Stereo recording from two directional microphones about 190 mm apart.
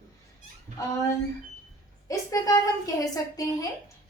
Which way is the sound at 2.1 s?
15° left (ahead or behind).